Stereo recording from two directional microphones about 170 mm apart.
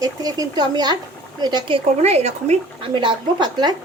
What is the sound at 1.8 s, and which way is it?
Speech, 40° right (ahead or behind).